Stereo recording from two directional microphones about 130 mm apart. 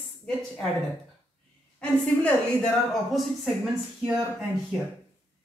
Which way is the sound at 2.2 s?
5° left (ahead or behind).